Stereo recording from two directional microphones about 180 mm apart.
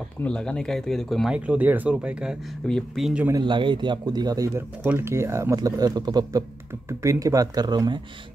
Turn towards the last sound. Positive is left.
turn(degrees=-20)  # may be behind; listen again after turning